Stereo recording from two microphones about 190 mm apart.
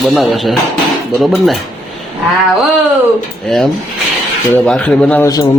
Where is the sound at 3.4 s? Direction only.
Centre (ahead or behind).